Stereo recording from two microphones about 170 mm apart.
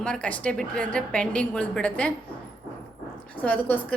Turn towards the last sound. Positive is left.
turn(degrees=10)  # may be behind; listen again after turning